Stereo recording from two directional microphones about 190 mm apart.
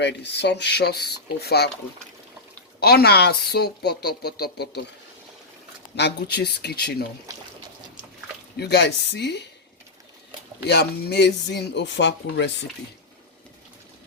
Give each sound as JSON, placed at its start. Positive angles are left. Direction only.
{"t": 0.0, "sound": "speech", "side_deg": 65}
{"t": 2.8, "sound": "speech", "side_deg": 55}
{"t": 6.0, "sound": "speech", "side_deg": 60}
{"t": 8.5, "sound": "speech", "side_deg": 65}
{"t": 10.7, "sound": "speech", "side_deg": 60}